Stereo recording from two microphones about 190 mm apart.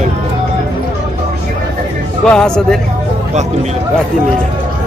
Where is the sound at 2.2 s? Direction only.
5° left (ahead or behind).